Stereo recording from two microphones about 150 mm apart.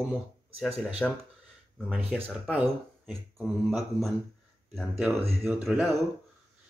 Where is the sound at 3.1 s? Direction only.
Centre (ahead or behind).